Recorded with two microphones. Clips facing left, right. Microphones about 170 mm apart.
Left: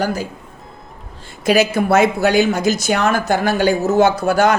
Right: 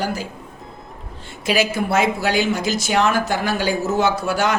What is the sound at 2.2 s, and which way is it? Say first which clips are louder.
Speech: left 5 dB; 50° left (ahead or behind).